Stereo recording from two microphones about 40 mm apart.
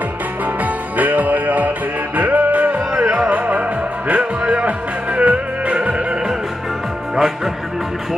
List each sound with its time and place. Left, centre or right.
0.6 s music: right
7.2 s music: centre